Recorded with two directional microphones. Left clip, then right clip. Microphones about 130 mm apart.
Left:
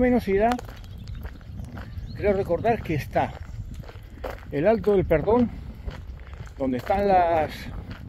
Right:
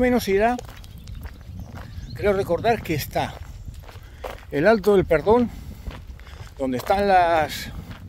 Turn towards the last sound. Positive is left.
turn(degrees=-35)  # may be behind; listen again after turning